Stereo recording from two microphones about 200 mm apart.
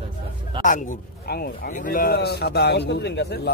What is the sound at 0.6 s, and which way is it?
A man's voice, 40° left (ahead or behind).